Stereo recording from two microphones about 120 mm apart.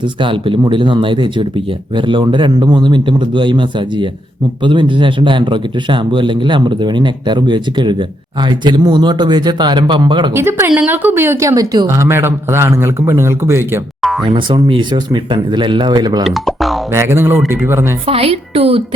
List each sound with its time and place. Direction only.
0.0 s a man's voice: 45° right (ahead or behind)
10.3 s speech: 20° right (ahead or behind)
14.0 s a sound: centre (ahead or behind)
14.3 s a man's voice: 45° right (ahead or behind)
16.2 s speech: centre (ahead or behind)
16.9 s speech: 20° right (ahead or behind)
18.0 s speech: 55° right (ahead or behind)